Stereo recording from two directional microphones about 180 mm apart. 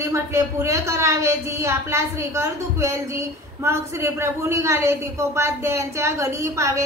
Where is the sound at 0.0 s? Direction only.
15° right (ahead or behind).